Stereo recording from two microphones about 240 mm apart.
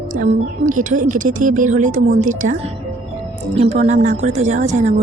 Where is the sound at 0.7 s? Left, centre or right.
Right.